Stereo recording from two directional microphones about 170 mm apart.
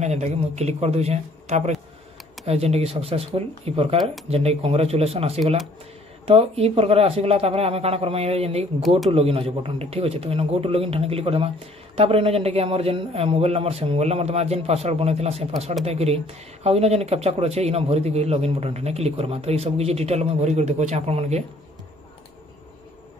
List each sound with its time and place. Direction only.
0.0 s speech: 40° right (ahead or behind)